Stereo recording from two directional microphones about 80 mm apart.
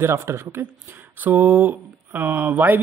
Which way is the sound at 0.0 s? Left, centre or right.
Right.